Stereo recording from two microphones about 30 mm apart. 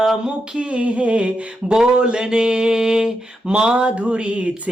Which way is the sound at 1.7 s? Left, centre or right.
Right.